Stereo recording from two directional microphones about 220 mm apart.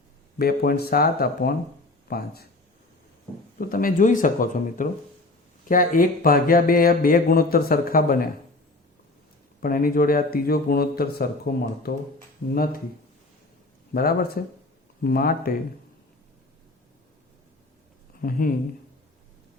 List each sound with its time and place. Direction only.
0.3 s a man's voice: 45° left (ahead or behind)
3.6 s speech: 40° left (ahead or behind)
9.6 s a man's voice: 40° left (ahead or behind)
13.9 s a man's voice: 45° left (ahead or behind)
18.2 s speech: 40° left (ahead or behind)